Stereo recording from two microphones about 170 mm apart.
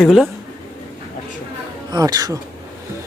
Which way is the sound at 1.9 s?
20° right (ahead or behind).